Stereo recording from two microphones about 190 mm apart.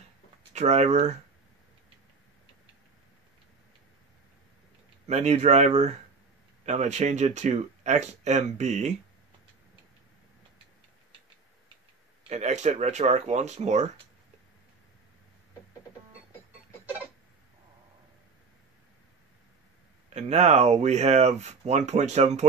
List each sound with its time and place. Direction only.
0.5 s speech: 35° right (ahead or behind)
5.0 s speech: 35° right (ahead or behind)
12.3 s speech: 35° right (ahead or behind)
20.2 s speech: 35° right (ahead or behind)